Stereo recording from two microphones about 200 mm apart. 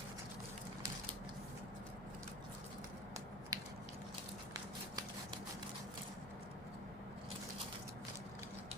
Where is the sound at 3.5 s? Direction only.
20° right (ahead or behind).